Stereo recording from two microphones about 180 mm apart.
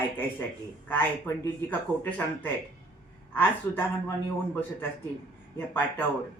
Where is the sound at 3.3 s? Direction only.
10° left (ahead or behind).